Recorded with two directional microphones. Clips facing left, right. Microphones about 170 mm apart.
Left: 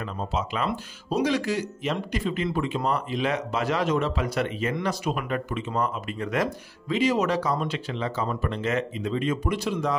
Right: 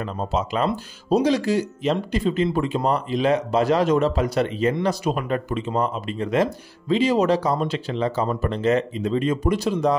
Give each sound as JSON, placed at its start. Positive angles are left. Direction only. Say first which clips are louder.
{"t": 0.0, "sound": "speech", "louder": "right 4 dB", "side_deg": -35}